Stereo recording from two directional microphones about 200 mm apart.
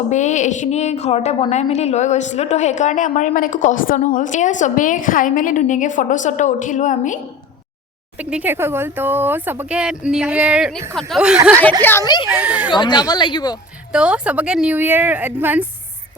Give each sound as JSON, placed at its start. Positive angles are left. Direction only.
{"t": 0.1, "sound": "a woman's voice", "side_deg": 35}
{"t": 8.2, "sound": "speech", "side_deg": -5}
{"t": 11.8, "sound": "speech", "side_deg": 10}
{"t": 12.3, "sound": "speech", "side_deg": -5}
{"t": 12.7, "sound": "speech", "side_deg": 20}
{"t": 13.9, "sound": "speech", "side_deg": -5}